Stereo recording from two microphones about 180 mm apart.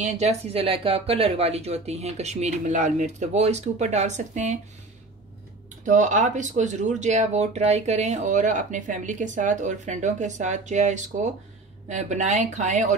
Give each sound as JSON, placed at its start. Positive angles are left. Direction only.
{"t": 0.0, "sound": "speech", "side_deg": -35}
{"t": 5.9, "sound": "speech", "side_deg": -45}